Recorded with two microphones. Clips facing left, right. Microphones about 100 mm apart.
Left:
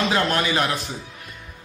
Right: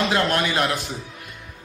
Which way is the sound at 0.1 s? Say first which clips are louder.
Even; centre (ahead or behind).